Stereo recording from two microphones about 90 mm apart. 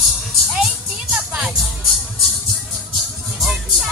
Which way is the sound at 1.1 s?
5° right (ahead or behind).